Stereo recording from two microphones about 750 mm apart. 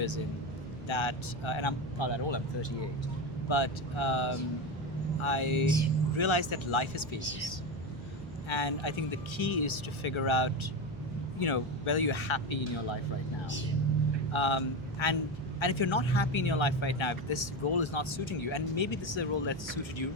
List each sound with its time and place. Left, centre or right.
0.9 s speech: left
14.3 s speech: left